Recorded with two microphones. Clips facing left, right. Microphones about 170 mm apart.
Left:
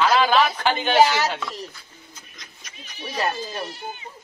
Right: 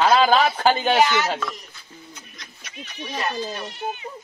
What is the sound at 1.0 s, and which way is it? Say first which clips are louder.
Speech: left 5 dB; 35° left (ahead or behind).